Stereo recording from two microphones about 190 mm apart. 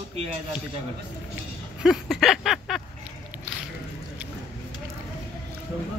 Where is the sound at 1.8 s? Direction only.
Centre (ahead or behind).